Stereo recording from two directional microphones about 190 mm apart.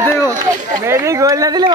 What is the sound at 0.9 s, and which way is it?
Speech, 15° right (ahead or behind).